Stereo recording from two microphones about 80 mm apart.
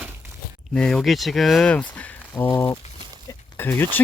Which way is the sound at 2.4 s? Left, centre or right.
Left.